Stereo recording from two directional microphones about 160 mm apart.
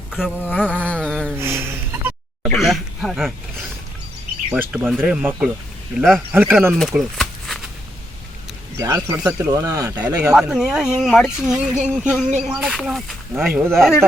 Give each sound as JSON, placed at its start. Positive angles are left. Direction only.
{"t": 0.1, "sound": "a sound", "side_deg": -5}
{"t": 0.3, "sound": "a sound", "side_deg": 10}
{"t": 1.4, "sound": "a sound", "side_deg": -15}
{"t": 2.4, "sound": "a sound", "side_deg": 0}
{"t": 4.5, "sound": "speech", "side_deg": -10}
{"t": 6.3, "sound": "speech", "side_deg": -10}
{"t": 6.7, "sound": "shuffling cards", "side_deg": 0}
{"t": 8.8, "sound": "speech", "side_deg": -20}
{"t": 9.1, "sound": "speech", "side_deg": -10}
{"t": 10.2, "sound": "speech", "side_deg": -5}
{"t": 13.4, "sound": "speech", "side_deg": -15}
{"t": 13.7, "sound": "speech", "side_deg": 0}